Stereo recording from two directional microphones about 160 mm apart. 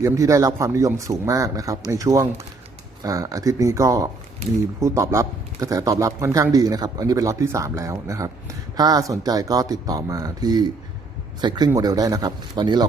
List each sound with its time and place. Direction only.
0.0 s speech: 20° right (ahead or behind)